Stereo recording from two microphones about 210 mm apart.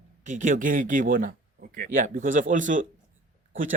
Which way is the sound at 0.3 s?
35° right (ahead or behind).